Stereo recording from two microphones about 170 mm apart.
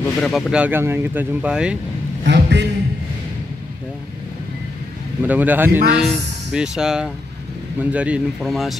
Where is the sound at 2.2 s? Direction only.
90° right.